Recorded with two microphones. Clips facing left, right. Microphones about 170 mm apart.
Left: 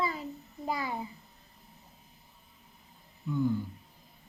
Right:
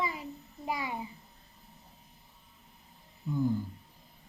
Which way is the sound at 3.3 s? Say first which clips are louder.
Left 1 dB; 35° right (ahead or behind).